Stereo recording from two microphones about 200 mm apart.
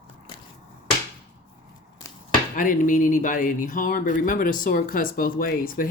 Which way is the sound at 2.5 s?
40° left (ahead or behind).